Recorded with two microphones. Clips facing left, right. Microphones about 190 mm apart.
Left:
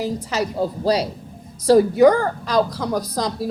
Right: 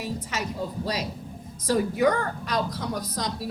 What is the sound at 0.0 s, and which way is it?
Speech, 35° left (ahead or behind).